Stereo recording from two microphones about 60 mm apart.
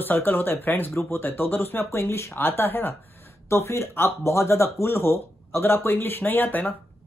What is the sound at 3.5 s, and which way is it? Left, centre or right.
Speech, left.